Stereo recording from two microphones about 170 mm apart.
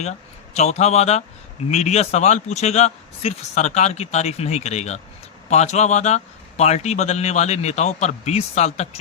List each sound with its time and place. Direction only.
0.5 s a man's voice: 40° left (ahead or behind)